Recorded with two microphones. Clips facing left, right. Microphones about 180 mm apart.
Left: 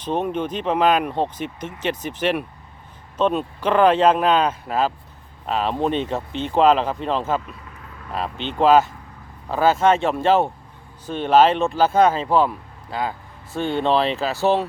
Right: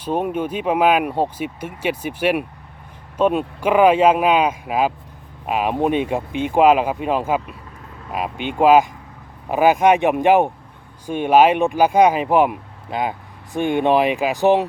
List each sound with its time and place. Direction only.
0.0 s speech: 10° right (ahead or behind)